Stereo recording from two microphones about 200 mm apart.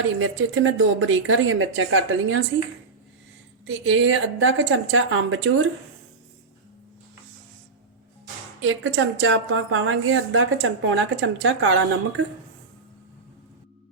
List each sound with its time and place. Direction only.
0.2 s a woman's voice: 75° right (ahead or behind)
3.7 s a woman's voice: 75° right (ahead or behind)
8.6 s a woman's voice: 65° right (ahead or behind)